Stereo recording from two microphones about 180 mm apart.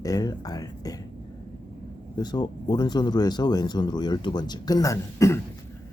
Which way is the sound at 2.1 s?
25° left (ahead or behind).